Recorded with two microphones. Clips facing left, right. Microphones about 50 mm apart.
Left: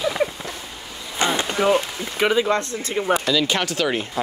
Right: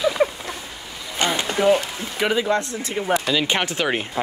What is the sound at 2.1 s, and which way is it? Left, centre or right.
Speech, left.